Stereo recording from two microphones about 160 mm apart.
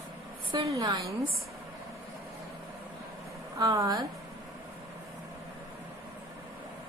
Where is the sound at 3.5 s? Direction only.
20° right (ahead or behind).